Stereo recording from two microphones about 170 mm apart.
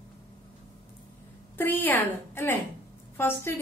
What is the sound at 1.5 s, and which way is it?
A woman's voice, 10° left (ahead or behind).